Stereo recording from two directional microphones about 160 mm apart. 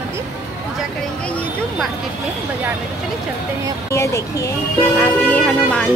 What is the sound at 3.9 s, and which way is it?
Speech, 20° left (ahead or behind).